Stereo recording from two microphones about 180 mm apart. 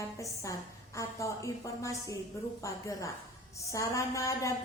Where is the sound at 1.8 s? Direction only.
20° left (ahead or behind).